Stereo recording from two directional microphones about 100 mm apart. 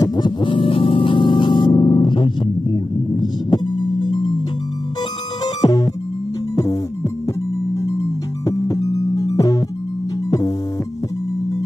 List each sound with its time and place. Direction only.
0.0 s music: 45° left (ahead or behind)
5.4 s music: 40° left (ahead or behind)